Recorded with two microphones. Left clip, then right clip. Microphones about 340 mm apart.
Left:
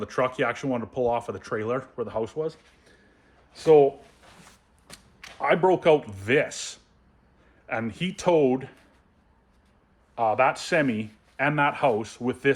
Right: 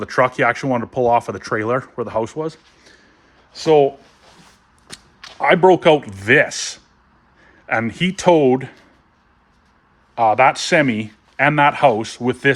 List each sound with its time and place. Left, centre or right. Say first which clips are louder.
0.0 s speech: right 9 dB; right
5.4 s speech: right 9 dB; right
10.2 s speech: right 9 dB; right